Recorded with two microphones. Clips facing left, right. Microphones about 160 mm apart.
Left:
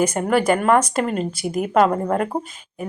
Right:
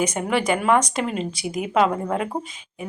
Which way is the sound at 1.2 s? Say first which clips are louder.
Left 3 dB; 50° left (ahead or behind).